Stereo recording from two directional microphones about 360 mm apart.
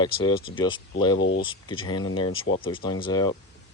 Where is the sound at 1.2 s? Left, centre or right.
Left.